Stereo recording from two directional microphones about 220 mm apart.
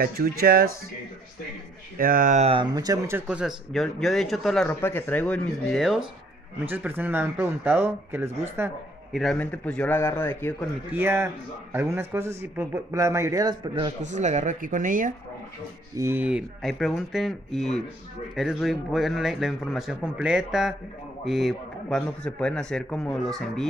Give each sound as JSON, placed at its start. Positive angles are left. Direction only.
{"t": 0.0, "sound": "speech", "side_deg": -40}
{"t": 2.0, "sound": "speech", "side_deg": -40}
{"t": 10.9, "sound": "speech", "side_deg": -10}
{"t": 14.0, "sound": "speech", "side_deg": -30}
{"t": 16.0, "sound": "speech", "side_deg": -10}